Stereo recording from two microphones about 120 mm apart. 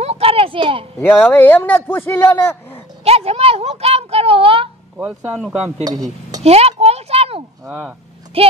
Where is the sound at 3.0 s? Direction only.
60° right (ahead or behind).